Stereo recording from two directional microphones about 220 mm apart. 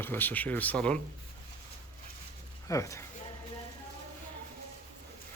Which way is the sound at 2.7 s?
15° left (ahead or behind).